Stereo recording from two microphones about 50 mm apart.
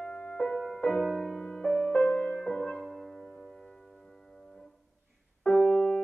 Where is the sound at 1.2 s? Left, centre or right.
Centre.